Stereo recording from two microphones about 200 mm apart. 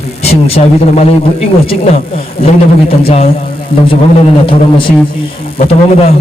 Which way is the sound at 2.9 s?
30° left (ahead or behind).